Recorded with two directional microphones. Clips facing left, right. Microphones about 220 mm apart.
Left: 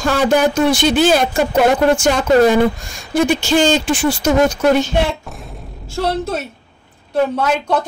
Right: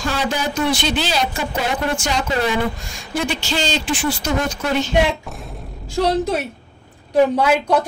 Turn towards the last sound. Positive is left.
turn(degrees=-10)  # may be behind; listen again after turning